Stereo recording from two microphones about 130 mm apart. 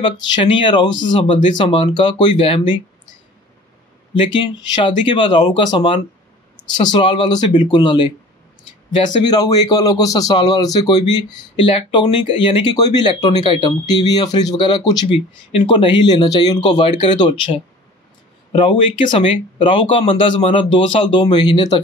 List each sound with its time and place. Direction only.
0.0 s speech: 40° left (ahead or behind)
4.1 s speech: 35° left (ahead or behind)
9.2 s speech: 30° left (ahead or behind)